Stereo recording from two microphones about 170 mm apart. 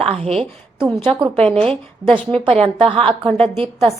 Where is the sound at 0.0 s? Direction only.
35° right (ahead or behind).